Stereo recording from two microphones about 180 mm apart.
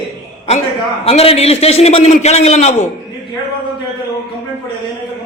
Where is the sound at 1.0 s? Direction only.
35° left (ahead or behind).